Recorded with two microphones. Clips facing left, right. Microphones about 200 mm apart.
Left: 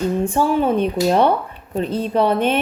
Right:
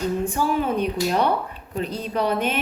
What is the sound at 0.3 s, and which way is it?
A woman's voice, 25° left (ahead or behind).